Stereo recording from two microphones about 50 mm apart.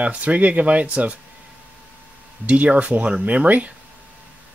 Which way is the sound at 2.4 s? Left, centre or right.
Right.